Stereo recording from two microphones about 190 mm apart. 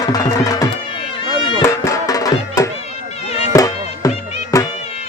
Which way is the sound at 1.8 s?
20° left (ahead or behind).